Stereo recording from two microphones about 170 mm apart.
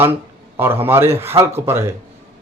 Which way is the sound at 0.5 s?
15° right (ahead or behind).